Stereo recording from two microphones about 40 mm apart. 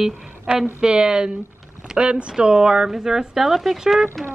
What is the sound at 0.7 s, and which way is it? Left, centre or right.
A woman's voice, centre.